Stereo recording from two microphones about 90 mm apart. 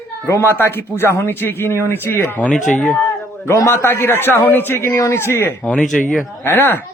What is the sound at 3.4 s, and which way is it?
Speech, 30° left (ahead or behind).